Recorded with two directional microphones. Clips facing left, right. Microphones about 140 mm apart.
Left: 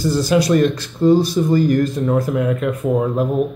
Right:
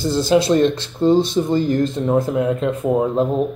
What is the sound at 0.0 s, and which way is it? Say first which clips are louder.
Speech: even; 25° right (ahead or behind).